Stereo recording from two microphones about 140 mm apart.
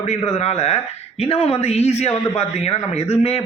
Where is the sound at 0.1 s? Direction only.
50° left (ahead or behind).